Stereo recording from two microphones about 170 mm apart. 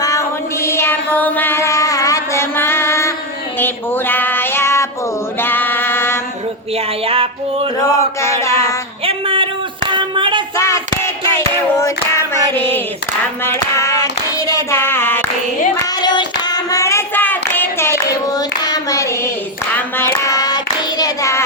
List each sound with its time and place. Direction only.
0.0 s music: 20° left (ahead or behind)
3.6 s female singing: 10° left (ahead or behind)
5.4 s music: 10° left (ahead or behind)
7.1 s music: 35° right (ahead or behind)
7.9 s a sound: 15° left (ahead or behind)
9.0 s a sound: 30° right (ahead or behind)
10.6 s child singing: 15° left (ahead or behind)
12.5 s clapping: 10° left (ahead or behind)
13.4 s child singing: 15° left (ahead or behind)
19.7 s hands: 15° left (ahead or behind)